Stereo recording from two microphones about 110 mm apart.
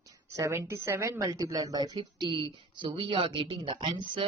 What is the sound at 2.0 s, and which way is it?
A woman's voice, 45° right (ahead or behind).